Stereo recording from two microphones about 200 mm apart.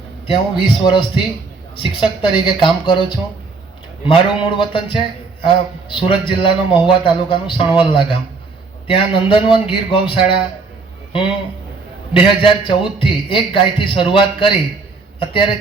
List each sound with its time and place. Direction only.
0.3 s a man's voice: 25° left (ahead or behind)
12.1 s a man's voice: 25° left (ahead or behind)